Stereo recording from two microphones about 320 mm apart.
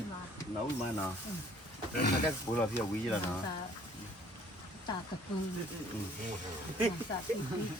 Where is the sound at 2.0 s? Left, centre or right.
Left.